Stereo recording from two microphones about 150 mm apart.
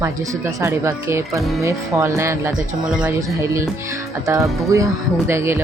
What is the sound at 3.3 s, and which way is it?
Speech, 20° right (ahead or behind).